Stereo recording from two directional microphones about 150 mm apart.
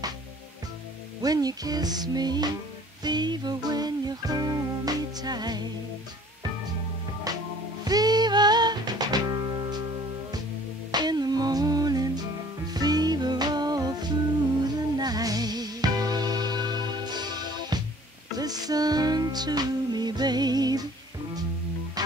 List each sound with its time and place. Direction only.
1.2 s music: 25° right (ahead or behind)
7.3 s music: 25° right (ahead or behind)
10.9 s humming: 30° right (ahead or behind)
12.7 s music: 25° right (ahead or behind)
22.0 s music: 25° right (ahead or behind)